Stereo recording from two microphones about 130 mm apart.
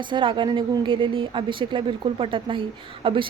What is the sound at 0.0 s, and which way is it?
Speech, 40° right (ahead or behind).